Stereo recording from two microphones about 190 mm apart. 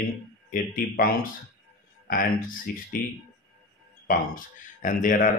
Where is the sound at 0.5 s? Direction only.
50° left (ahead or behind).